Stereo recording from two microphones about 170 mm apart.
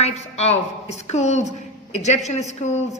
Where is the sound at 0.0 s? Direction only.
40° left (ahead or behind).